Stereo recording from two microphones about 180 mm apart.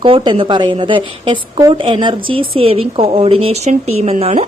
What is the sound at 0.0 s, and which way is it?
A woman's voice, 30° right (ahead or behind).